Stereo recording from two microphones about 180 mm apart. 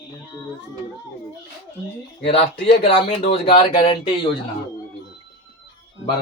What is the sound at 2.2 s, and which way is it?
Speech, 35° left (ahead or behind).